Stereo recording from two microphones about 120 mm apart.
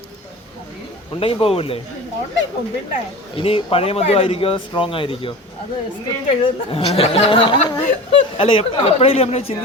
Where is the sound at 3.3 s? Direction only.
50° left (ahead or behind).